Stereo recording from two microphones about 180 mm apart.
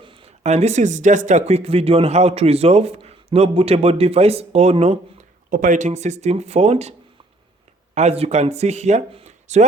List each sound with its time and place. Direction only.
0.0 s speech: 30° right (ahead or behind)
7.9 s speech: 35° right (ahead or behind)